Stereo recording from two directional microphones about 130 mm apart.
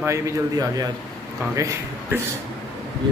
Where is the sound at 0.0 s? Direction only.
25° right (ahead or behind).